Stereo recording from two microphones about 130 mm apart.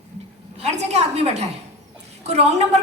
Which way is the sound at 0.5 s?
55° right (ahead or behind).